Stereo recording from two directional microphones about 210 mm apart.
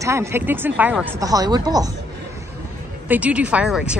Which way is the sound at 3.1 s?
5° right (ahead or behind).